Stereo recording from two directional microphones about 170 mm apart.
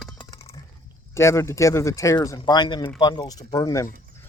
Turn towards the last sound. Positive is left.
turn(degrees=20)  # may be behind; listen again after turning